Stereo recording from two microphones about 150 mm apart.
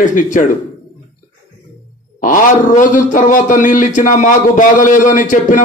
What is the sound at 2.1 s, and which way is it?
Speech, 60° left (ahead or behind).